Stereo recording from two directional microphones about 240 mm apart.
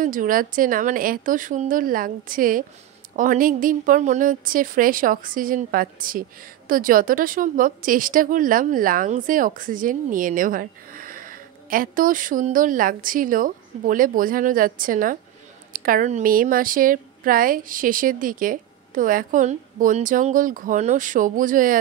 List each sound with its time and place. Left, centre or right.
0.0 s a woman's voice: right